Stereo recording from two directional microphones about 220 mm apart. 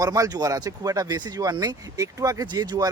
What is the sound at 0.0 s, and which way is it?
Speech, 15° right (ahead or behind).